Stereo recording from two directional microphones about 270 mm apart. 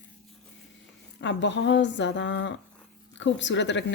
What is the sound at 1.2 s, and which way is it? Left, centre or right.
Speech, left.